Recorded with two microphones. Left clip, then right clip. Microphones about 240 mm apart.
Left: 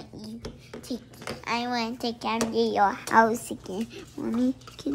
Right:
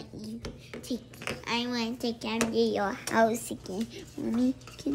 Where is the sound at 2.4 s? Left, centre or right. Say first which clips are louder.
Left 5 dB; centre.